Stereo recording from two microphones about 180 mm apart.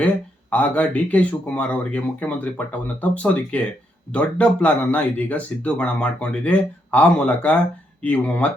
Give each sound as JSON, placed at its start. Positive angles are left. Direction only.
{"t": 0.5, "sound": "speech", "side_deg": 10}